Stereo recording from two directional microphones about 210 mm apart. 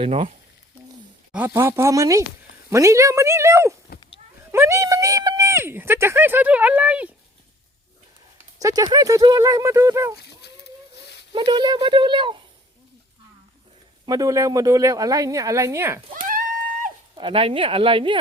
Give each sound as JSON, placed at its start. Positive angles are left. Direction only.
{"t": 0.0, "sound": "speech", "side_deg": -30}
{"t": 1.3, "sound": "speech", "side_deg": -10}
{"t": 8.5, "sound": "speech", "side_deg": -15}
{"t": 10.4, "sound": "a sound", "side_deg": 50}
{"t": 11.3, "sound": "speech", "side_deg": -20}
{"t": 14.0, "sound": "speech", "side_deg": -15}
{"t": 17.2, "sound": "speech", "side_deg": -25}